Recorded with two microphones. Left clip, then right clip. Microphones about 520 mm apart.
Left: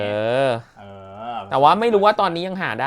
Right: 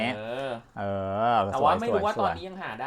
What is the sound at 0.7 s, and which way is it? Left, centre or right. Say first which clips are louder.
Speech: right 9 dB; right.